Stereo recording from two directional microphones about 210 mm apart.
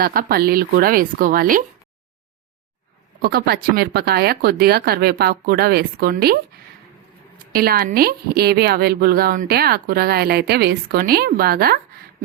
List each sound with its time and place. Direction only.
0.0 s a woman's voice: 45° right (ahead or behind)
3.2 s a woman's voice: 45° right (ahead or behind)
7.5 s a woman's voice: 45° right (ahead or behind)